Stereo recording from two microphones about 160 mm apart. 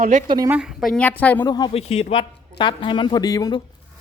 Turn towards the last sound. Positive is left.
turn(degrees=25)  # may be behind; listen again after turning